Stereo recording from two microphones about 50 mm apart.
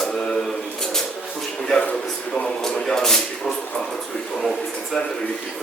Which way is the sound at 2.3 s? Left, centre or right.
Centre.